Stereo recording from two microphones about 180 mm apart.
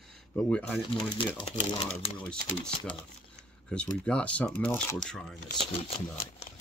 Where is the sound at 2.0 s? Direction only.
35° left (ahead or behind).